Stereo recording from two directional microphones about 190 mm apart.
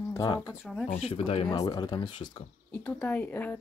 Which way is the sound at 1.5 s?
20° left (ahead or behind).